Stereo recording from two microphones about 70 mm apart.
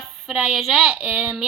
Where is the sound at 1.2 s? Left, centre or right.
Centre.